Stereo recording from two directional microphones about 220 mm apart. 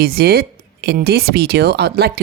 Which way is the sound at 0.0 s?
45° right (ahead or behind).